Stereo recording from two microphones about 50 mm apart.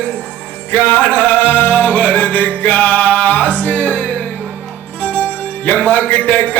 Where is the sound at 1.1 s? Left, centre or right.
Left.